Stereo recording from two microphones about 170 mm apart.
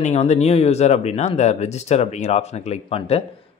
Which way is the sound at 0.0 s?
40° left (ahead or behind).